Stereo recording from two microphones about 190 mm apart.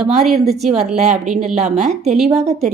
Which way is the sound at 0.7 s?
5° right (ahead or behind).